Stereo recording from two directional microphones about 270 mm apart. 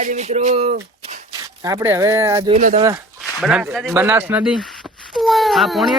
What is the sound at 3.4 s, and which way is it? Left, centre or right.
Speech, centre.